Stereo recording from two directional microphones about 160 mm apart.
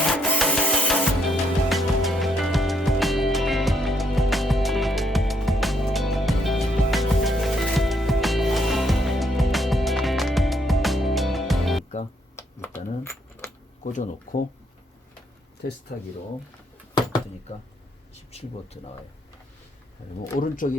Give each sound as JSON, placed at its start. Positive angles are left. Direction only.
{"t": 0.1, "sound": "music", "side_deg": 5}
{"t": 12.4, "sound": "typewriter", "side_deg": 15}
{"t": 13.8, "sound": "speech", "side_deg": 55}
{"t": 15.9, "sound": "speech", "side_deg": 70}
{"t": 18.3, "sound": "speech", "side_deg": 40}
{"t": 20.4, "sound": "speech", "side_deg": 55}